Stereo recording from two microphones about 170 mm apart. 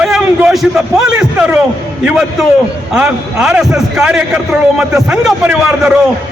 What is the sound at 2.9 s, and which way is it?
A man's voice, 5° right (ahead or behind).